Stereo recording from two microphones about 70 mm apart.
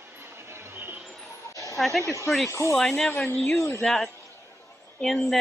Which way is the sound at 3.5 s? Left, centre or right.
Left.